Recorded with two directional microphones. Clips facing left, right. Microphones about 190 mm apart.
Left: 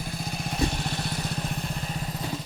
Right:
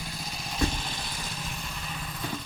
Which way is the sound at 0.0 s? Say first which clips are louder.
Left 6 dB; 55° left (ahead or behind).